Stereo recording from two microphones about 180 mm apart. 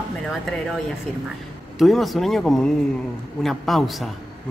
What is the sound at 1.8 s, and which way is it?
A man's voice, centre (ahead or behind).